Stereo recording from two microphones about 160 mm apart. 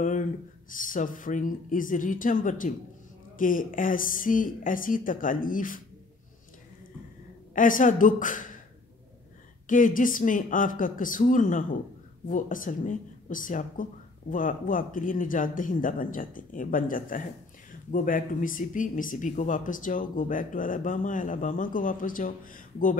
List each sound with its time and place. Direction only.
0.7 s speech: 55° left (ahead or behind)
7.5 s speech: 55° left (ahead or behind)
9.7 s speech: 55° left (ahead or behind)